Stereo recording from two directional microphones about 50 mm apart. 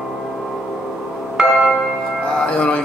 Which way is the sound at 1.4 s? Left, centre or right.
Centre.